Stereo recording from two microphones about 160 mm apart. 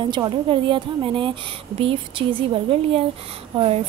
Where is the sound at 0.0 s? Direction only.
30° right (ahead or behind).